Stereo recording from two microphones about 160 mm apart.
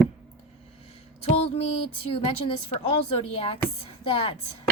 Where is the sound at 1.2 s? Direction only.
40° left (ahead or behind).